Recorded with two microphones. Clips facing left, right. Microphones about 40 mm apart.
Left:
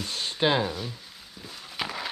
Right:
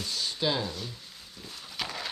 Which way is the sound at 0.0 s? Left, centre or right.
Left.